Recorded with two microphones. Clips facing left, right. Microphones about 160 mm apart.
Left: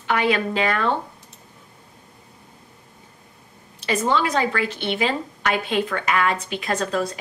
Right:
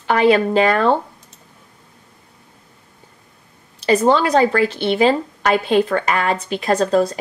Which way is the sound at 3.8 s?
35° right (ahead or behind).